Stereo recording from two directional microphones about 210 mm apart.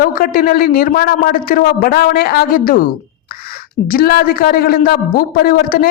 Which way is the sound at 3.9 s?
45° left (ahead or behind).